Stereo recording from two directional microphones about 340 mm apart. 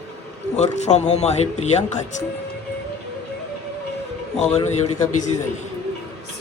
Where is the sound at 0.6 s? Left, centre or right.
Centre.